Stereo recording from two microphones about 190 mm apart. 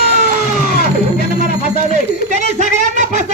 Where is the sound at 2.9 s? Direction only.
40° right (ahead or behind).